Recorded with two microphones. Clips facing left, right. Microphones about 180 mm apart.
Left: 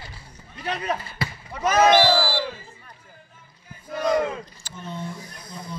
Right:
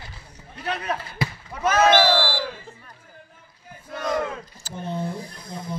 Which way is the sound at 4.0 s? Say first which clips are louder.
Left 4 dB; centre (ahead or behind).